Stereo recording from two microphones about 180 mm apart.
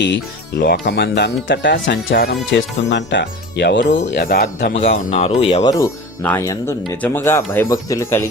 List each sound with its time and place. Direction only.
0.6 s speech: 65° left (ahead or behind)
4.7 s speech: 40° left (ahead or behind)
5.8 s speech: 15° left (ahead or behind)